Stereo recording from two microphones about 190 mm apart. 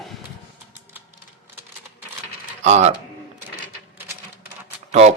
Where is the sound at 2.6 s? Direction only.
35° right (ahead or behind).